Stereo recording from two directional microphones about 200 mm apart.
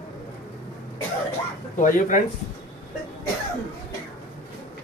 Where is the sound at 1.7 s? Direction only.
40° left (ahead or behind).